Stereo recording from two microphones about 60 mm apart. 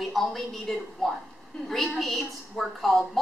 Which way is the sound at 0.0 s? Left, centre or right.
Centre.